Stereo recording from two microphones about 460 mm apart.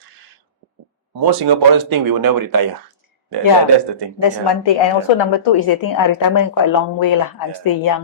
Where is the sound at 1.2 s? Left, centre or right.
Right.